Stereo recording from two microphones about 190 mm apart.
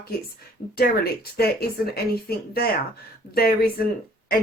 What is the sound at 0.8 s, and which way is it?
Speech, 55° left (ahead or behind).